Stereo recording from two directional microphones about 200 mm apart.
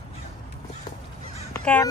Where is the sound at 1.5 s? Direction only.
10° left (ahead or behind).